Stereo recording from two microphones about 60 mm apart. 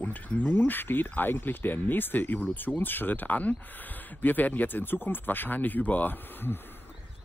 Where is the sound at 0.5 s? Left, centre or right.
Left.